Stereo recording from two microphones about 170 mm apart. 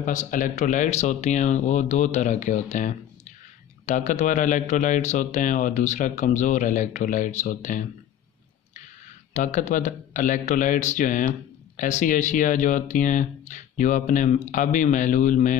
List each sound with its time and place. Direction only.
0.0 s a man's voice: 50° left (ahead or behind)
9.3 s a man's voice: 45° left (ahead or behind)